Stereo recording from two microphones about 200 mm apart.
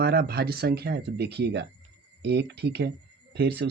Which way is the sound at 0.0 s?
50° right (ahead or behind).